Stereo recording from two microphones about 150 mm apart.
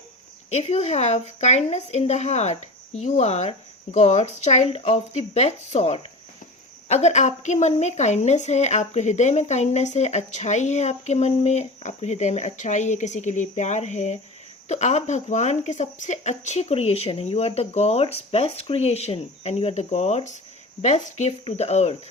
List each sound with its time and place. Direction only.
0.5 s a woman's voice: 45° left (ahead or behind)